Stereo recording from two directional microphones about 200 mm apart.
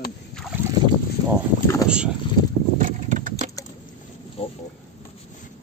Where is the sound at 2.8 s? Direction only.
40° right (ahead or behind).